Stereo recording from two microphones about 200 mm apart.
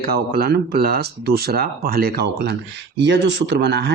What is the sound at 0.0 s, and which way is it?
Speech, 50° right (ahead or behind).